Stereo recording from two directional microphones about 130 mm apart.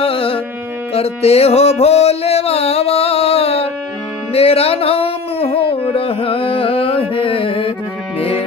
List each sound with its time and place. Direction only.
0.0 s carnatic music: 45° left (ahead or behind)
0.9 s music: 50° left (ahead or behind)